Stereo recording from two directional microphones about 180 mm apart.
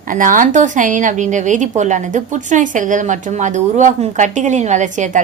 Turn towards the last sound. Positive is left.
turn(degrees=-45)  # may be behind; listen again after turning